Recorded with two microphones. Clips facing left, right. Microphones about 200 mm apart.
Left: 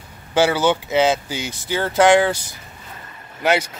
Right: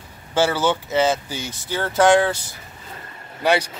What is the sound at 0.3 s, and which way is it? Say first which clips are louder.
Speech: left 2 dB; 15° left (ahead or behind).